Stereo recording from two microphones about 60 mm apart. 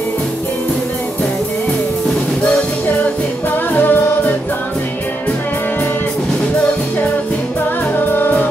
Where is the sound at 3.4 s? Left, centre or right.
Left.